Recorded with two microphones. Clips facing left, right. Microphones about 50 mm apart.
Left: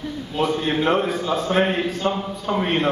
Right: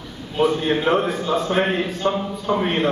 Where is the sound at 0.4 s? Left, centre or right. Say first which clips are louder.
Right 2 dB; centre.